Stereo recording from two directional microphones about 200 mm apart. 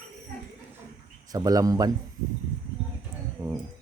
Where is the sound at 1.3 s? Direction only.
20° right (ahead or behind).